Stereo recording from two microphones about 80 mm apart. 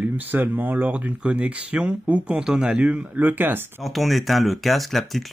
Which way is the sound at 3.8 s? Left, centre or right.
Centre.